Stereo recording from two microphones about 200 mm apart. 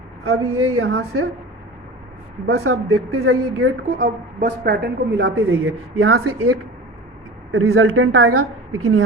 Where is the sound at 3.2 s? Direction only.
85° right.